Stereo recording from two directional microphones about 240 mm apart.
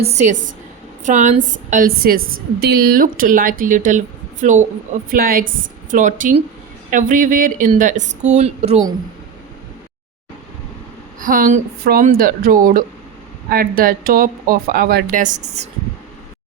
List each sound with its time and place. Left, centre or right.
0.0 s a woman's voice: right
11.2 s a woman's voice: right